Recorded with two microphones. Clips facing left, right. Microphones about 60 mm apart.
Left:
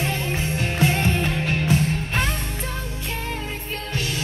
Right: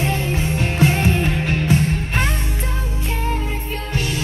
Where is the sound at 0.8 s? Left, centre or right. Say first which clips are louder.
Right 3 dB; centre.